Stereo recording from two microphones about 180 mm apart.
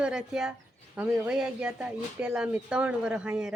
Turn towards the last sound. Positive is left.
turn(degrees=-5)  # may be behind; listen again after turning